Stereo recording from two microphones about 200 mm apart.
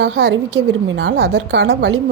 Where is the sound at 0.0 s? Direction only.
55° right (ahead or behind).